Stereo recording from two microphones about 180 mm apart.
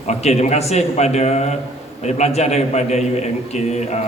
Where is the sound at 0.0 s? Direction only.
40° left (ahead or behind).